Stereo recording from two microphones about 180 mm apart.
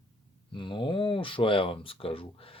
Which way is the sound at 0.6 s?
25° left (ahead or behind).